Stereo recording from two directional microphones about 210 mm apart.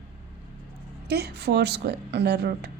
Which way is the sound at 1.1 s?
50° right (ahead or behind).